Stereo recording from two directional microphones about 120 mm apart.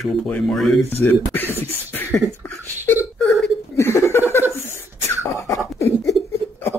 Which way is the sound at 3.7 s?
20° left (ahead or behind).